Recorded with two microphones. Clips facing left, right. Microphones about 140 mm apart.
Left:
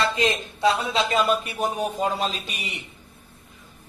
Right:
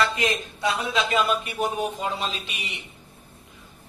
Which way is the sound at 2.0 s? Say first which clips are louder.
Left 4 dB; 40° left (ahead or behind).